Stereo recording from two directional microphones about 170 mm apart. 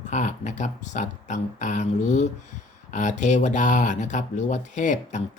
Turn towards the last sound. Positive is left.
turn(degrees=45)  # may be behind; listen again after turning